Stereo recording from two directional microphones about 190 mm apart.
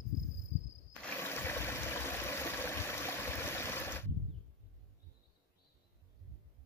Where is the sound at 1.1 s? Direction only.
10° left (ahead or behind).